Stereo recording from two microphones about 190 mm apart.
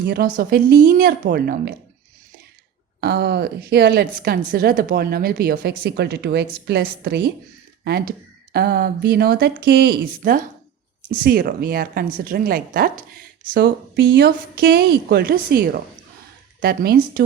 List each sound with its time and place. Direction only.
0.0 s a woman's voice: 55° right (ahead or behind)
3.0 s a woman's voice: 60° right (ahead or behind)
10.2 s a woman's voice: 50° right (ahead or behind)
13.5 s a woman's voice: 60° right (ahead or behind)